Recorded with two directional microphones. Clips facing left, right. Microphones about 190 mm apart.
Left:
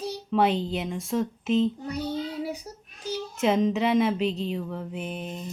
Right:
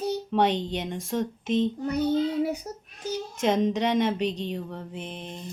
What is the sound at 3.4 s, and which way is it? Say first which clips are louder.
Speech: left 1 dB; centre (ahead or behind).